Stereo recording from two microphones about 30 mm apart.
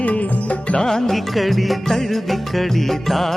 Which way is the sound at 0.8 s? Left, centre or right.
Centre.